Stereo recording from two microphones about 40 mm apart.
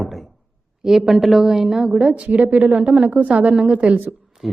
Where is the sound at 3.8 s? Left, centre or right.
Right.